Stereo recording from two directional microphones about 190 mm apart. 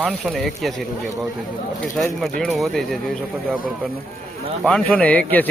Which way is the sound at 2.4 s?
Centre (ahead or behind).